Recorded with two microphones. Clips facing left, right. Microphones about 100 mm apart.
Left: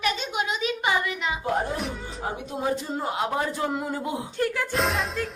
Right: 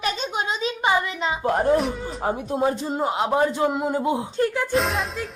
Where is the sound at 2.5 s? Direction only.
25° right (ahead or behind).